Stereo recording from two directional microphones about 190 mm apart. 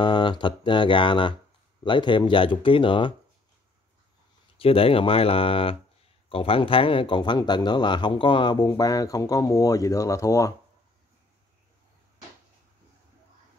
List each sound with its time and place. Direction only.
0.0 s speech: 25° left (ahead or behind)
4.6 s speech: 30° left (ahead or behind)